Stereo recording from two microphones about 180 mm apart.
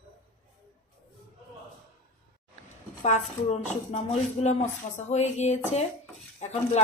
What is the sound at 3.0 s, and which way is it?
A woman's voice, 40° left (ahead or behind).